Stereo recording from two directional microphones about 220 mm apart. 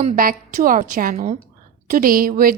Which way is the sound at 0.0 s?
40° right (ahead or behind).